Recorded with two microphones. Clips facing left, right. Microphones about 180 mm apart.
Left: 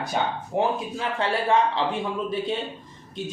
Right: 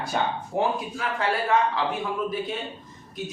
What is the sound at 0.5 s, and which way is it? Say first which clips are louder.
A man's voice: left 3 dB; 30° left (ahead or behind).